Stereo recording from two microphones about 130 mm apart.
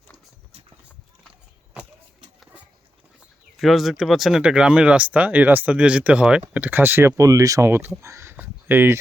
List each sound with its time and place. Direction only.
3.6 s speech: centre (ahead or behind); by 9.0 s 15° right (ahead or behind)